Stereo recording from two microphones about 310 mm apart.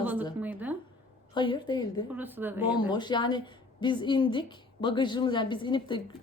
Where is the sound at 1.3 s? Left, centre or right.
Centre.